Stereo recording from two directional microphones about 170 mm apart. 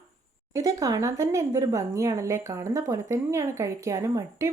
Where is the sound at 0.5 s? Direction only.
20° right (ahead or behind).